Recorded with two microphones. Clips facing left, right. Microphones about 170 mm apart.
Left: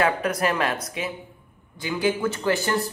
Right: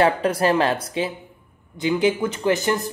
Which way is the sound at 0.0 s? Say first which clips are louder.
Right 4 dB; 30° right (ahead or behind).